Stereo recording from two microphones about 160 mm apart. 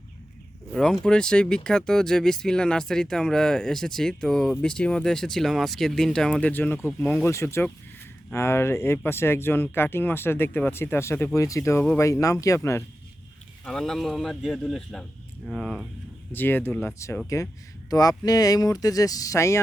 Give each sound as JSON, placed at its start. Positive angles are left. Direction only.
{"t": 0.7, "sound": "speech", "side_deg": 5}
{"t": 13.7, "sound": "speech", "side_deg": 5}
{"t": 16.3, "sound": "speech", "side_deg": 10}